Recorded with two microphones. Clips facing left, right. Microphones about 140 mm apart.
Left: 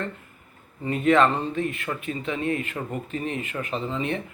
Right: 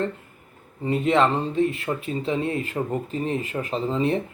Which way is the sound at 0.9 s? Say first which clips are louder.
Even; 25° right (ahead or behind).